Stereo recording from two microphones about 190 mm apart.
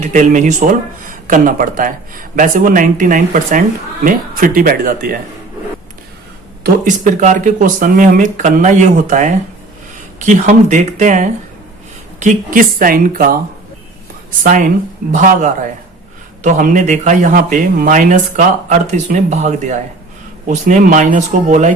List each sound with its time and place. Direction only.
0.0 s speech: 40° right (ahead or behind)
6.6 s speech: 45° right (ahead or behind)